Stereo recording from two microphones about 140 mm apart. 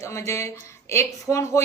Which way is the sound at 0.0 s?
20° left (ahead or behind).